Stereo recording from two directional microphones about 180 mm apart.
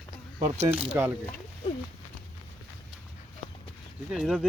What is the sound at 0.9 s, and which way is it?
Speech, 15° right (ahead or behind).